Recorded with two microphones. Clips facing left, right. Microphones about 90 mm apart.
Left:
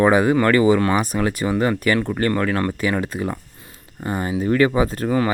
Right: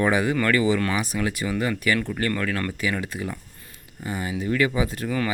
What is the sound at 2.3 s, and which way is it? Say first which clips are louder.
Speech: left 6 dB; 35° left (ahead or behind).